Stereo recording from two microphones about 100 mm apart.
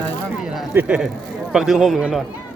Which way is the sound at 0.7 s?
15° right (ahead or behind).